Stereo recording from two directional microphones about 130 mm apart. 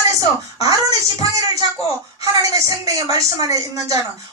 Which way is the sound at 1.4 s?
25° right (ahead or behind).